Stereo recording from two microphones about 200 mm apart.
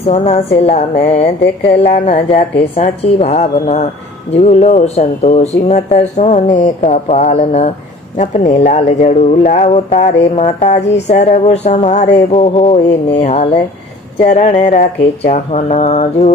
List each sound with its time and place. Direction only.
0.0 s a woman's voice: 30° left (ahead or behind)